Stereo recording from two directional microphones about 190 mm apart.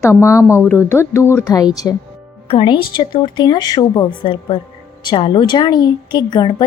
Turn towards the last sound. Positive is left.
turn(degrees=20)  # may be behind; listen again after turning